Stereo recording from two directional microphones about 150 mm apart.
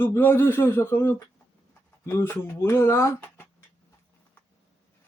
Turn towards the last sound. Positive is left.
turn(degrees=15)  # may be behind; listen again after turning